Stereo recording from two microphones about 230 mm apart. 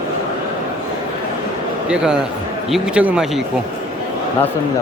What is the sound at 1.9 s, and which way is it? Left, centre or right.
Speech, centre.